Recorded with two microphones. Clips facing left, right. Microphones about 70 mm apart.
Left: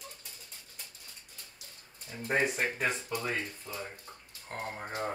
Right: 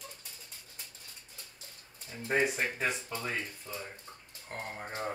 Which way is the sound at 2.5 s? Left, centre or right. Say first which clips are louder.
Left 1 dB; centre.